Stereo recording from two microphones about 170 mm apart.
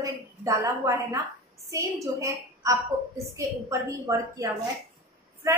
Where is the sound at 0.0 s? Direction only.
20° right (ahead or behind).